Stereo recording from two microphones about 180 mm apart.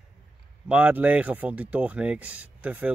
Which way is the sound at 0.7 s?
5° right (ahead or behind).